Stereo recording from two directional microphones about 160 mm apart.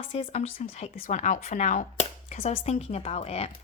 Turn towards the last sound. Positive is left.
turn(degrees=40)  # may be behind; listen again after turning